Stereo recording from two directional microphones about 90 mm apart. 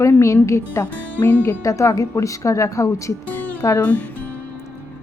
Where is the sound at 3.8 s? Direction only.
20° left (ahead or behind).